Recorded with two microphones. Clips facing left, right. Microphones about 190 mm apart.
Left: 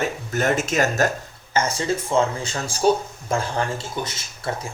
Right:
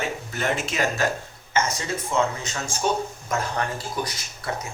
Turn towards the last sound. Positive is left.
turn(degrees=25)  # may be behind; listen again after turning